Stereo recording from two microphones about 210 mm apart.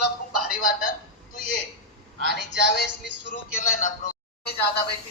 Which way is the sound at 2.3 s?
55° left (ahead or behind).